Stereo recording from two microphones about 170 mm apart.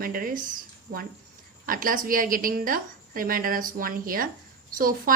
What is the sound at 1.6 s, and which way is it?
A woman's voice, 55° right (ahead or behind).